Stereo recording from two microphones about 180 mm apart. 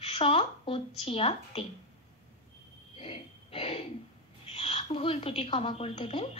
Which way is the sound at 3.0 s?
30° left (ahead or behind).